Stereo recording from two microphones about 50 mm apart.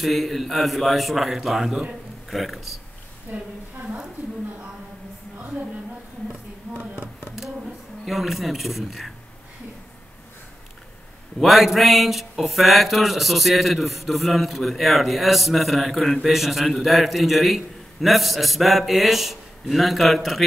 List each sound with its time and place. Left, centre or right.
0.0 s speech: centre
3.3 s a woman's voice: right
8.0 s speech: centre
11.3 s speech: centre